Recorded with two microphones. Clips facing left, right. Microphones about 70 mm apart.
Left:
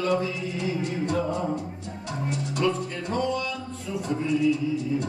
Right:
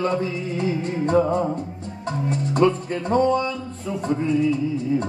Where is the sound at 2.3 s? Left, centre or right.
Right.